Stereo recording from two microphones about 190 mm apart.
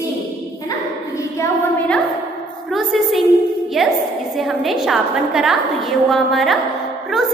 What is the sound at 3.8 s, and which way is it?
A woman's voice, centre (ahead or behind).